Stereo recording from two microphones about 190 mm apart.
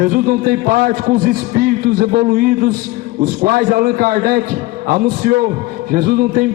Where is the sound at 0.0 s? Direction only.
50° right (ahead or behind).